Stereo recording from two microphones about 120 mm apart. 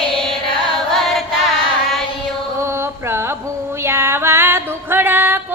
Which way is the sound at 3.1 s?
20° right (ahead or behind).